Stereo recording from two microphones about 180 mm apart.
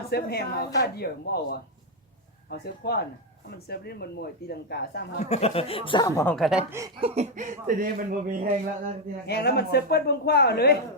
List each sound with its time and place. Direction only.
0.1 s speech: 60° left (ahead or behind)
5.2 s speech: 35° left (ahead or behind); by 6.3 s 15° left (ahead or behind)
6.3 s speech: centre (ahead or behind)
7.0 s speech: 40° right (ahead or behind)
9.2 s speech: 65° left (ahead or behind)